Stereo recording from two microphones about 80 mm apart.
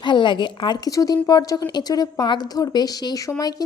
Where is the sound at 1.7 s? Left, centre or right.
Left.